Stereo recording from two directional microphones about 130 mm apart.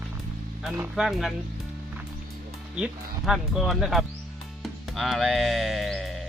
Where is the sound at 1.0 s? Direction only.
Centre (ahead or behind).